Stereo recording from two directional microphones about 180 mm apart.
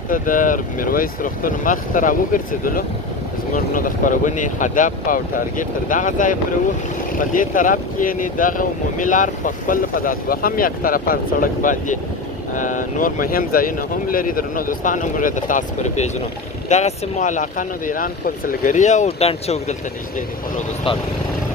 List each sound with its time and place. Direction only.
0.1 s speech: 45° left (ahead or behind)